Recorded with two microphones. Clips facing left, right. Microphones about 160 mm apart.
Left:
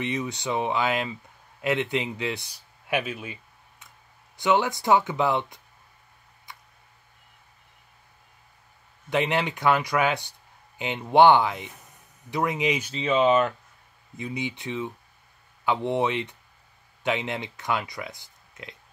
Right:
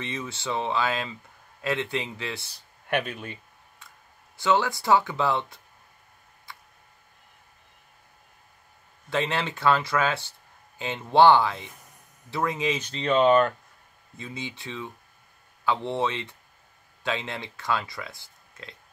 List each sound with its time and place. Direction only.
0.0 s a man's voice: 20° left (ahead or behind)
4.4 s speech: 20° left (ahead or behind)
6.5 s a sound: 20° left (ahead or behind)
9.1 s a man's voice: 15° left (ahead or behind)
14.1 s a man's voice: 20° left (ahead or behind)